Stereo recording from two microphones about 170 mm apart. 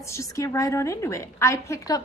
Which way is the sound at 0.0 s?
15° left (ahead or behind).